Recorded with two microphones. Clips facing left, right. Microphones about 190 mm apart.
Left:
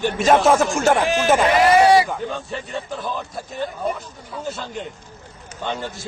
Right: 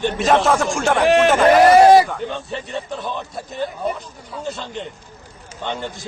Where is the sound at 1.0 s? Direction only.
65° right (ahead or behind).